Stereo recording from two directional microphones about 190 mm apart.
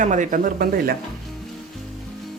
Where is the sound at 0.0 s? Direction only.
40° right (ahead or behind).